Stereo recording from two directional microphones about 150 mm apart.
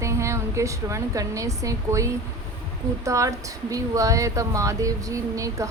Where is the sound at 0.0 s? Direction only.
20° right (ahead or behind).